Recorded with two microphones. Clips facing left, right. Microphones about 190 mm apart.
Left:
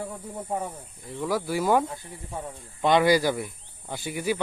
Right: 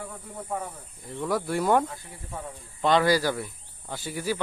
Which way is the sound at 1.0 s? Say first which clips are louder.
Even; centre (ahead or behind).